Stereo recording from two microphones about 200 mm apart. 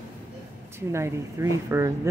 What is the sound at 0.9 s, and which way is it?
Speech, 15° right (ahead or behind).